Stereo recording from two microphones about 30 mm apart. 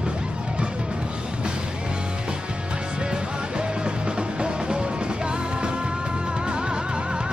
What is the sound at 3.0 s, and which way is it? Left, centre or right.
Music, right.